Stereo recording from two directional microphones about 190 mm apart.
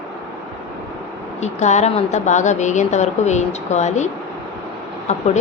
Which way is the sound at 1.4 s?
35° left (ahead or behind).